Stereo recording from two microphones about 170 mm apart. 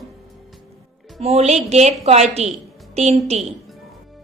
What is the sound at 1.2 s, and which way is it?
A woman's voice, 40° right (ahead or behind).